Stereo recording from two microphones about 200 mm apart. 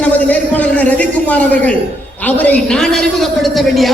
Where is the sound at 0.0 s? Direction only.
5° left (ahead or behind).